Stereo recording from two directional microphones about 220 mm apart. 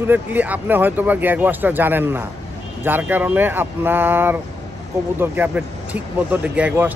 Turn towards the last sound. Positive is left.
turn(degrees=-10)  # may be behind; listen again after turning